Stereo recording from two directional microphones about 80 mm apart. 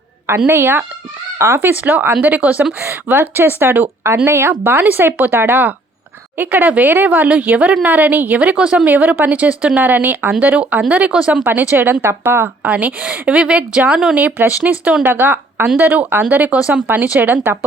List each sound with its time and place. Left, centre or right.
0.3 s speech: right
1.7 s speech: right